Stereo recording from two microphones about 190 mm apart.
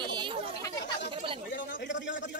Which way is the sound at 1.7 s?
70° left (ahead or behind).